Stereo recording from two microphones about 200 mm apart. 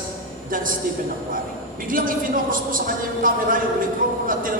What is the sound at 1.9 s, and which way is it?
A man's voice, 45° right (ahead or behind).